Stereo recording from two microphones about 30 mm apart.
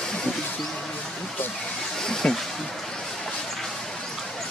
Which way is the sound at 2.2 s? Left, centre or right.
Left.